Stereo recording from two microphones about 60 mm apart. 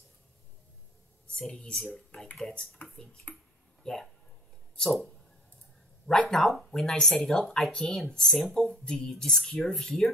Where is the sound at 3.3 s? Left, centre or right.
Left.